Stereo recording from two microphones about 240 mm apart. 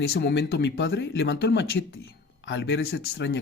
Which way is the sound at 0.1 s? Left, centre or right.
Left.